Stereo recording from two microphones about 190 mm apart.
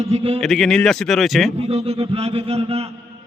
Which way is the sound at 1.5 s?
35° right (ahead or behind).